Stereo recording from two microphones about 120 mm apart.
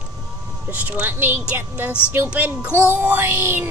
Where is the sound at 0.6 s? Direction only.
10° right (ahead or behind).